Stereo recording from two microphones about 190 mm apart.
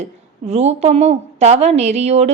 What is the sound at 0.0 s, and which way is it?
A woman's voice, 35° right (ahead or behind).